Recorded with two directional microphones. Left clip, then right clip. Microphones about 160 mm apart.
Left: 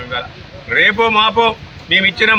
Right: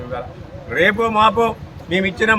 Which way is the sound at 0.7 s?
15° right (ahead or behind).